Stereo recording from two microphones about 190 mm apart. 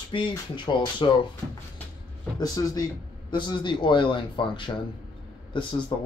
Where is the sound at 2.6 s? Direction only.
20° left (ahead or behind).